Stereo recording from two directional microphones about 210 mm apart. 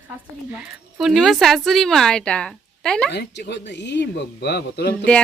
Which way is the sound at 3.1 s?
55° left (ahead or behind).